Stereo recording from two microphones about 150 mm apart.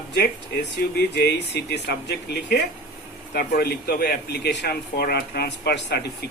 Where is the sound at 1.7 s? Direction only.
90° left.